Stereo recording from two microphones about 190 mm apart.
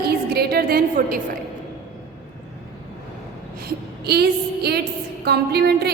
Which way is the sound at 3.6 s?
55° right (ahead or behind).